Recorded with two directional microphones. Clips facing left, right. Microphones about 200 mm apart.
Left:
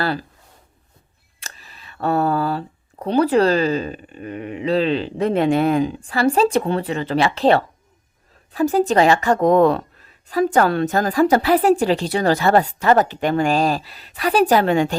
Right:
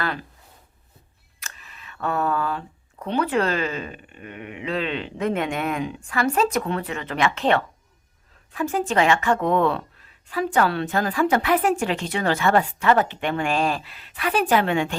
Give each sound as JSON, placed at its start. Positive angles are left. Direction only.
{"t": 0.0, "sound": "speech", "side_deg": 35}
{"t": 1.4, "sound": "speech", "side_deg": 35}